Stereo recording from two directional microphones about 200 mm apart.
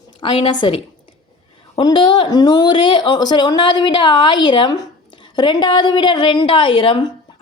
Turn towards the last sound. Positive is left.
turn(degrees=25)  # may be behind; listen again after turning